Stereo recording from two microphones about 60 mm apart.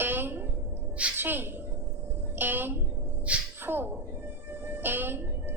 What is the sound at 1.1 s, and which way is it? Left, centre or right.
A woman's voice, right.